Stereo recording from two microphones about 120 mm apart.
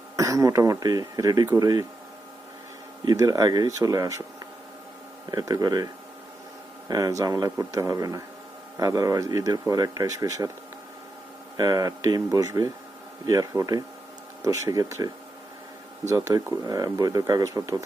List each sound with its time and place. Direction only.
0.2 s speech: 25° right (ahead or behind)
3.0 s speech: 30° right (ahead or behind)
5.3 s speech: 30° right (ahead or behind)
11.5 s speech: 30° right (ahead or behind)